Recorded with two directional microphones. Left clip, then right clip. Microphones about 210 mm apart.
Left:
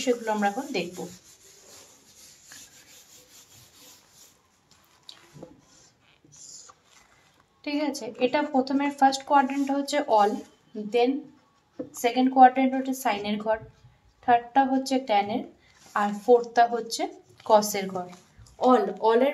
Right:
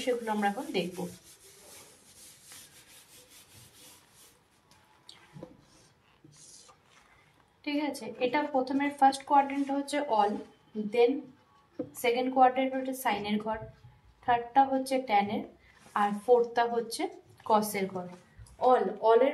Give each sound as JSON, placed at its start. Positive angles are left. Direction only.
{"t": 0.0, "sound": "speech", "side_deg": 45}
{"t": 7.6, "sound": "speech", "side_deg": 45}
{"t": 12.0, "sound": "speech", "side_deg": 45}